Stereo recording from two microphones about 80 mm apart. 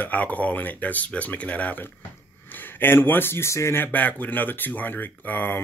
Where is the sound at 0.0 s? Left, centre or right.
Left.